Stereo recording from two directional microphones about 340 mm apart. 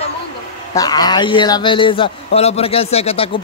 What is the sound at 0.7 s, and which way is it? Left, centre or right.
Speech, centre.